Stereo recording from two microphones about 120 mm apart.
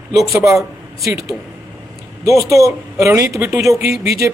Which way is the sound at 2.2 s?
25° right (ahead or behind).